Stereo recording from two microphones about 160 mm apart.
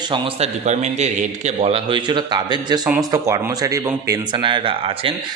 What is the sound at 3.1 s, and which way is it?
Speech, 20° right (ahead or behind).